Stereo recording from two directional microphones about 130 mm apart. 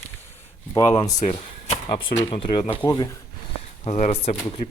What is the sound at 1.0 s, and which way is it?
Speech, 60° left (ahead or behind).